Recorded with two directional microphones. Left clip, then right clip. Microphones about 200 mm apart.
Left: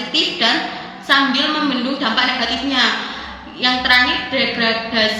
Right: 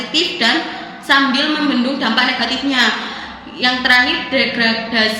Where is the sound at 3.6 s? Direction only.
20° right (ahead or behind).